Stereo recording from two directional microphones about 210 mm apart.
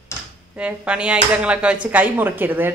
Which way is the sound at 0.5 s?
5° right (ahead or behind).